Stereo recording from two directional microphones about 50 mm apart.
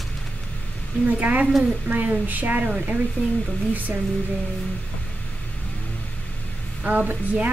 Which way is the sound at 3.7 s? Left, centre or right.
Right.